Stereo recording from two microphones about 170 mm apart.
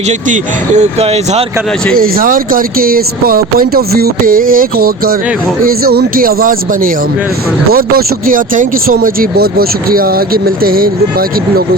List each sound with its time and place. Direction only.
0.8 s speech: 40° right (ahead or behind)
2.0 s speech: 55° right (ahead or behind)